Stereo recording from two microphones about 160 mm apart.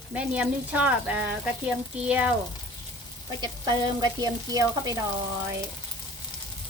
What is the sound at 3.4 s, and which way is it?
Frying, 25° right (ahead or behind).